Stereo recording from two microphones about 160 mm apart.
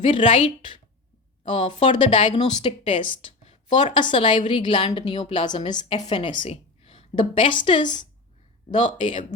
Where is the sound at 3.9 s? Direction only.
30° left (ahead or behind).